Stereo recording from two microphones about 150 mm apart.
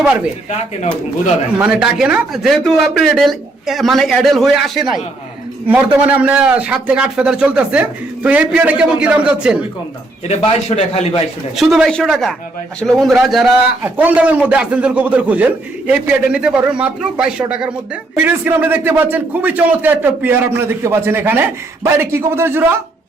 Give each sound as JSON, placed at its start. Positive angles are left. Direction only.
{"t": 1.6, "sound": "a man's voice", "side_deg": -5}
{"t": 10.8, "sound": "a man's voice", "side_deg": 45}
{"t": 11.5, "sound": "a man's voice", "side_deg": 0}